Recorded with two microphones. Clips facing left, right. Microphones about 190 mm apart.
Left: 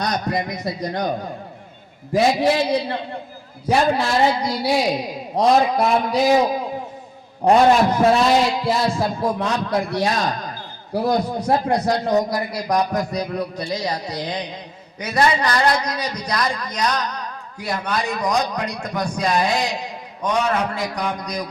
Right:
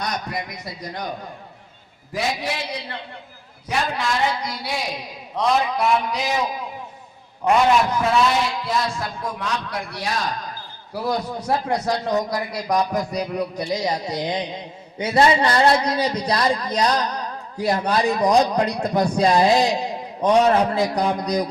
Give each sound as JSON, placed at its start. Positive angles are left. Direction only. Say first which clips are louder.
{"t": 0.0, "sound": "a man's voice", "louder": "left 5 dB", "side_deg": 40}
{"t": 2.1, "sound": "a man's voice", "louder": "left 9 dB", "side_deg": 25}
{"t": 10.9, "sound": "a man's voice", "louder": "left 4 dB", "side_deg": 45}
{"t": 11.3, "sound": "speech", "louder": "left 3 dB", "side_deg": 15}
{"t": 12.5, "sound": "a man's voice", "louder": "even", "side_deg": 0}
{"t": 13.1, "sound": "a man's voice", "louder": "even", "side_deg": -15}